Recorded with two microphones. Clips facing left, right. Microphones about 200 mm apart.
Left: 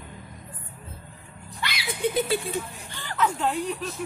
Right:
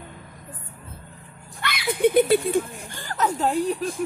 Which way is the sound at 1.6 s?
55° right (ahead or behind).